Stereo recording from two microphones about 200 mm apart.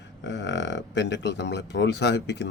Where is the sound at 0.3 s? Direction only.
60° left (ahead or behind).